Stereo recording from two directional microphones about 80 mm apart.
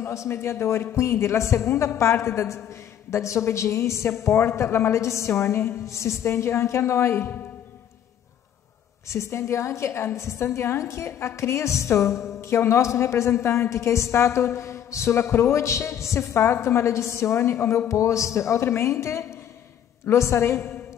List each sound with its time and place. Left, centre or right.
0.0 s a woman's voice: left
9.1 s a woman's voice: left